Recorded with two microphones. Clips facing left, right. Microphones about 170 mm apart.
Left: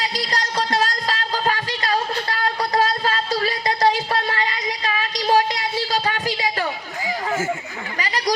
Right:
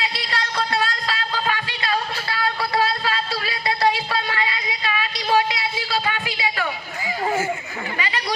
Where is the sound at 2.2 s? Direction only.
40° left (ahead or behind).